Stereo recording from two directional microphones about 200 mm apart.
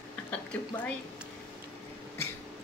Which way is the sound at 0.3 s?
5° left (ahead or behind).